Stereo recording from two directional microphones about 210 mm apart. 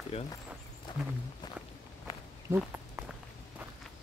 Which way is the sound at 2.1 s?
15° left (ahead or behind).